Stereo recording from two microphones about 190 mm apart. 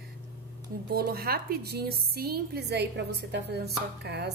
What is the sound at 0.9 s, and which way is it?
A woman's voice, 55° right (ahead or behind).